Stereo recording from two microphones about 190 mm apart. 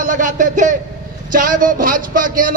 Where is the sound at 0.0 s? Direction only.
45° right (ahead or behind).